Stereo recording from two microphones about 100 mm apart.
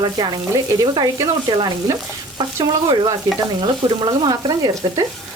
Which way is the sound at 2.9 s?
45° right (ahead or behind).